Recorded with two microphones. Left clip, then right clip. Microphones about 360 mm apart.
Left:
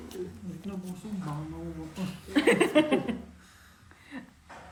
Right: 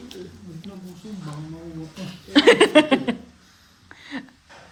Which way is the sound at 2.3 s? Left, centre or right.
Centre.